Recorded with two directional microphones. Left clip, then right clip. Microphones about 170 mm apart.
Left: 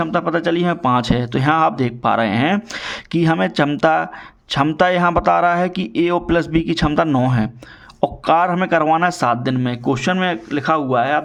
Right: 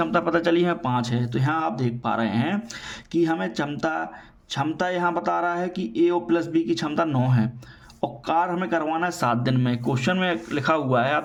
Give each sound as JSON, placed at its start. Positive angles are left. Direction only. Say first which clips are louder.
{"t": 0.0, "sound": "a man's voice", "louder": "left 3 dB", "side_deg": 25}
{"t": 0.8, "sound": "a man's voice", "louder": "left 9 dB", "side_deg": 40}